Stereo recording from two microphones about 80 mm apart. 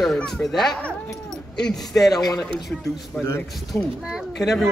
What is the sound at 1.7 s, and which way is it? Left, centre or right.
Speech, left.